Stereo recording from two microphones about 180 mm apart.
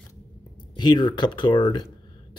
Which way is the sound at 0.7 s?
25° left (ahead or behind).